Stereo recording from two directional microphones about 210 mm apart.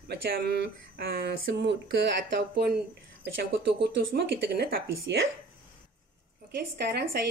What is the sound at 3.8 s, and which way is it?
Speech, 50° right (ahead or behind).